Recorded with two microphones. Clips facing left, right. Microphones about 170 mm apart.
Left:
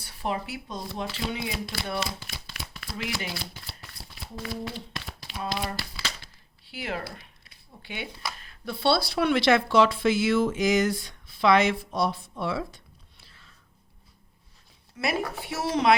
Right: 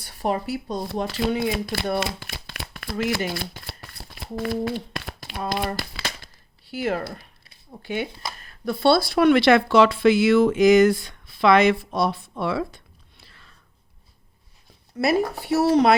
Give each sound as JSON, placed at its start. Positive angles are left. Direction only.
{"t": 0.0, "sound": "speech", "side_deg": -45}
{"t": 1.3, "sound": "a sound", "side_deg": -55}
{"t": 8.4, "sound": "speech", "side_deg": -45}
{"t": 14.9, "sound": "speech", "side_deg": -40}